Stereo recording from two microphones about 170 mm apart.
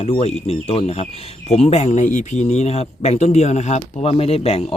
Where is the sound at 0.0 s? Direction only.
40° left (ahead or behind).